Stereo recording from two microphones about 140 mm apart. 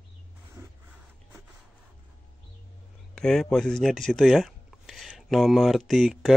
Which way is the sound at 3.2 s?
5° left (ahead or behind).